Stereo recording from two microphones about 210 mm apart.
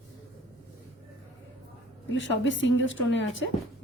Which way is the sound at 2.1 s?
60° left (ahead or behind).